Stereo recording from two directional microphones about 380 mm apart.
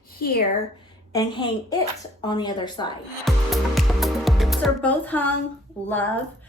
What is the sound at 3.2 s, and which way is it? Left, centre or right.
Speech, centre.